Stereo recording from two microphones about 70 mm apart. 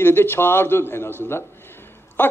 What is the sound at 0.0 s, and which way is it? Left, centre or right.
A man's voice, left.